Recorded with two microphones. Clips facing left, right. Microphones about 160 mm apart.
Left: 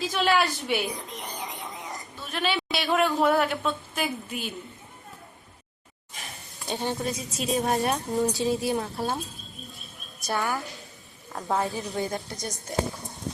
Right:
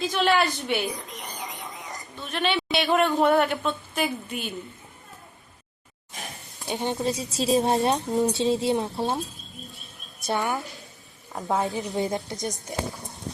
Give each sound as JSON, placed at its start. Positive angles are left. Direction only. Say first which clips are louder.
{"t": 0.0, "sound": "a woman's voice", "louder": "right 1 dB", "side_deg": 0}
{"t": 2.2, "sound": "a woman's voice", "louder": "right 2 dB", "side_deg": 5}
{"t": 6.7, "sound": "a woman's voice", "louder": "right 2 dB", "side_deg": -15}
{"t": 7.1, "sound": "a woman's voice", "louder": "right 5 dB", "side_deg": -35}
{"t": 10.2, "sound": "a woman's voice", "louder": "right 2 dB", "side_deg": -20}
{"t": 11.3, "sound": "a woman's voice", "louder": "right 2 dB", "side_deg": 0}
{"t": 11.5, "sound": "a woman's voice", "louder": "right 2 dB", "side_deg": -20}